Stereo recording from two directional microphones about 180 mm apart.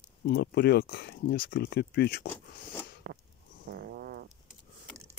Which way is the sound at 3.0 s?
60° right (ahead or behind).